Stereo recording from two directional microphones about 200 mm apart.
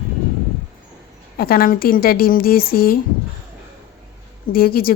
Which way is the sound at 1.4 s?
50° left (ahead or behind).